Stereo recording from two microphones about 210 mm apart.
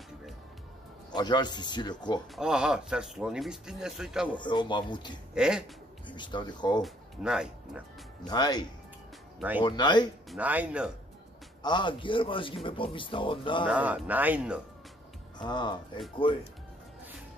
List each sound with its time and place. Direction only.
1.1 s speech: 20° left (ahead or behind)
2.3 s speech: 5° right (ahead or behind)
4.4 s speech: 20° left (ahead or behind)
5.3 s speech: 5° right (ahead or behind)
6.0 s speech: 20° left (ahead or behind)
6.8 s speech: 5° right (ahead or behind)
8.3 s speech: 20° left (ahead or behind)
10.3 s speech: 5° right (ahead or behind)
11.6 s speech: 20° left (ahead or behind)
13.7 s speech: 5° right (ahead or behind)
15.3 s speech: 20° left (ahead or behind)